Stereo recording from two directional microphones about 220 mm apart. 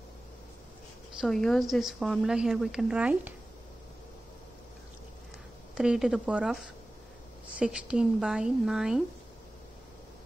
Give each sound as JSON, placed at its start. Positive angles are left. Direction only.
{"t": 1.2, "sound": "a woman's voice", "side_deg": 0}
{"t": 5.8, "sound": "a woman's voice", "side_deg": -5}